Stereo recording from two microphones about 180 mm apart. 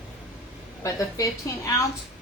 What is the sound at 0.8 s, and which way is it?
Speech, 20° left (ahead or behind).